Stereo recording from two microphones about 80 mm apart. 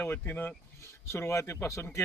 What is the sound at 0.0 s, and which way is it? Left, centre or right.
Speech, left.